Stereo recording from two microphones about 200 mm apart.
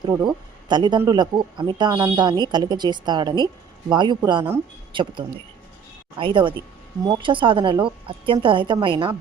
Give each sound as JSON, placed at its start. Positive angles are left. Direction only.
{"t": 0.0, "sound": "speech", "side_deg": -20}
{"t": 6.1, "sound": "speech", "side_deg": -25}